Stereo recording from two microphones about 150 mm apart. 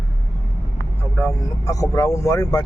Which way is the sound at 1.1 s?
20° left (ahead or behind).